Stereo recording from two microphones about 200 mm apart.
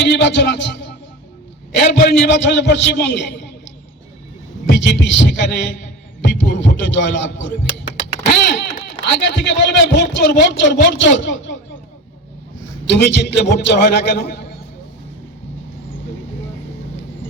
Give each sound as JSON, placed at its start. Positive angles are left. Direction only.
{"t": 0.0, "sound": "a man's voice", "side_deg": 60}
{"t": 4.7, "sound": "a man's voice", "side_deg": 60}
{"t": 12.9, "sound": "a man's voice", "side_deg": 60}